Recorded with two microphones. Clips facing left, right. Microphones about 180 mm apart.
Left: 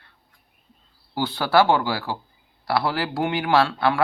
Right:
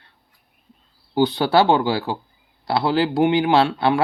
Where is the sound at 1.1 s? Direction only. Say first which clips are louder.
Right 4 dB; 20° right (ahead or behind).